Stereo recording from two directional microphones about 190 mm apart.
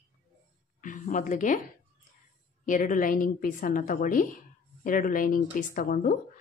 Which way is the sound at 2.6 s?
45° left (ahead or behind).